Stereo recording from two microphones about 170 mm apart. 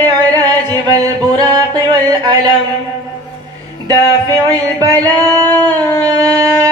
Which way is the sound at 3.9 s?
20° right (ahead or behind).